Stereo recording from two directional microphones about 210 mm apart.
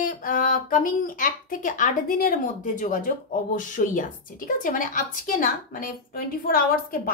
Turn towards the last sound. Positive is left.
turn(degrees=45)  # may be behind; listen again after turning